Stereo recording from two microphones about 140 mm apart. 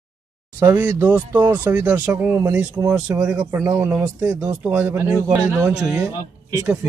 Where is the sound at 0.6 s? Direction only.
15° right (ahead or behind).